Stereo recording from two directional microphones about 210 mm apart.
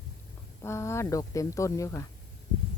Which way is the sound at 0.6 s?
15° left (ahead or behind).